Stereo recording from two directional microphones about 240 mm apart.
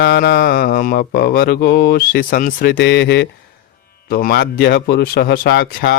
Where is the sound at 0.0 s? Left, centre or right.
Left.